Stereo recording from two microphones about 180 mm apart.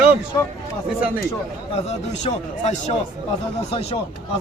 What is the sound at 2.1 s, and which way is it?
A man's voice, 40° left (ahead or behind).